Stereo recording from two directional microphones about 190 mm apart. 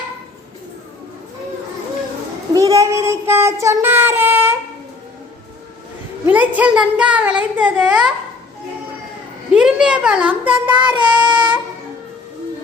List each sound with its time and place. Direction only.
2.5 s child singing: 20° right (ahead or behind)
6.2 s a child's voice: 10° right (ahead or behind)
9.6 s a child's voice: 5° right (ahead or behind)
11.3 s a sound: 25° right (ahead or behind)